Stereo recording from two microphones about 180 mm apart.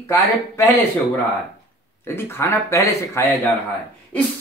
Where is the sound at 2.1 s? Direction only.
15° left (ahead or behind).